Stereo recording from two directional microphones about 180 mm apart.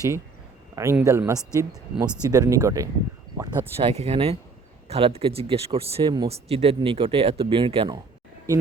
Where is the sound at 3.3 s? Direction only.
15° right (ahead or behind).